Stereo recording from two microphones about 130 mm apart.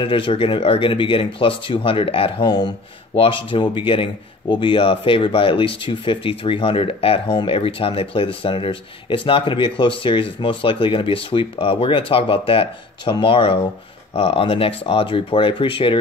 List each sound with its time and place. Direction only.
0.0 s speech: 40° left (ahead or behind)